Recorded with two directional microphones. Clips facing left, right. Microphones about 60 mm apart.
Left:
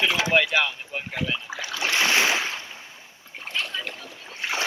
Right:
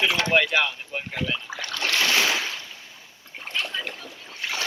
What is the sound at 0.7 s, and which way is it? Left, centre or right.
Boat, centre.